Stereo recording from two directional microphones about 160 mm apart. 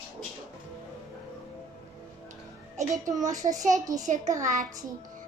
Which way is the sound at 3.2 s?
50° right (ahead or behind).